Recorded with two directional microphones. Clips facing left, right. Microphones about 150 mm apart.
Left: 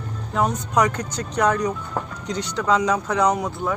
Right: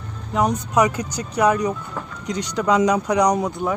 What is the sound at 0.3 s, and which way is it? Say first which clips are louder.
Speech: right 2 dB; 10° right (ahead or behind).